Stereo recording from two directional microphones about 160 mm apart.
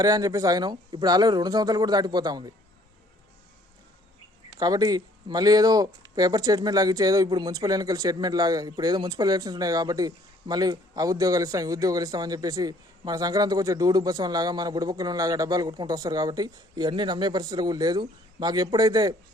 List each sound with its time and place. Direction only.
0.0 s speech: 20° right (ahead or behind)
4.6 s speech: 25° right (ahead or behind)